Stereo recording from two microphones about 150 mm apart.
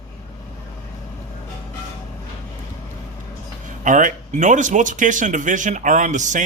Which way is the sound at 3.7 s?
60° right (ahead or behind).